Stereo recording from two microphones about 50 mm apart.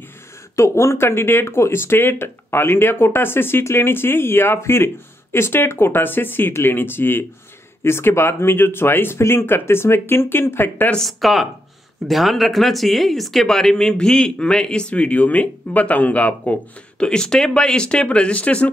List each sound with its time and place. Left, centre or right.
0.6 s speech: left
7.8 s speech: left
11.0 s speech: centre; by 16.5 s left
17.0 s speech: centre